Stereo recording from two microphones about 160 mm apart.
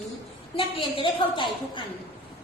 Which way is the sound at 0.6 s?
35° left (ahead or behind).